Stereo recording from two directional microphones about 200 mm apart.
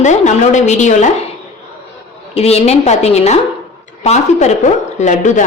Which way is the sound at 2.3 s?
30° left (ahead or behind).